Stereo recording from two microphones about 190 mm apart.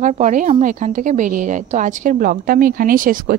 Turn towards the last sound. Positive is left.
turn(degrees=-45)  # may be behind; listen again after turning